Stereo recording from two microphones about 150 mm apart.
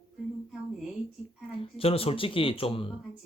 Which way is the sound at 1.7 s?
40° left (ahead or behind).